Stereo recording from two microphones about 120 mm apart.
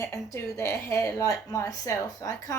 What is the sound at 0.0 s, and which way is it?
A woman's voice, 25° left (ahead or behind).